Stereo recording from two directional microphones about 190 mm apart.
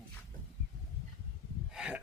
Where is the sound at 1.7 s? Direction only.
5° right (ahead or behind).